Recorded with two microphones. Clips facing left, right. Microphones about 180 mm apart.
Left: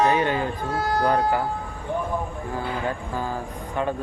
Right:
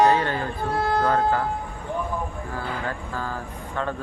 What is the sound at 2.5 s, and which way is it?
Speech, 15° left (ahead or behind).